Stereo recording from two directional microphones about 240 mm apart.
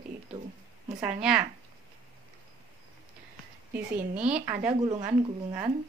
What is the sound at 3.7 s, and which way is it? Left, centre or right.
Speech, centre.